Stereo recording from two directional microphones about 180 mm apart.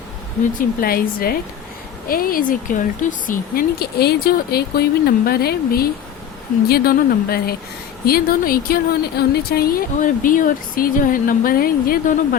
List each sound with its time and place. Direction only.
0.8 s speech: 55° left (ahead or behind)